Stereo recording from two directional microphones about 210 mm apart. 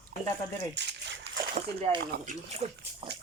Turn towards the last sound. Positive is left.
turn(degrees=-30)  # may be behind; listen again after turning